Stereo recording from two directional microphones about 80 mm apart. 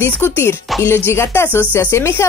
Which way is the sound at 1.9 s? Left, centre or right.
Left.